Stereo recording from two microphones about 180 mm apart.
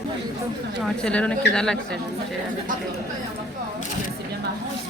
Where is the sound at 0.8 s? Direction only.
5° left (ahead or behind).